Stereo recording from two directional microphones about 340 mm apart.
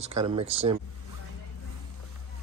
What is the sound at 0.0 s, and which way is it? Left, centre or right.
Speech, centre.